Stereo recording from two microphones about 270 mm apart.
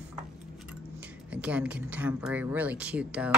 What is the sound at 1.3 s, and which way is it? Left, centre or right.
A woman's voice, centre.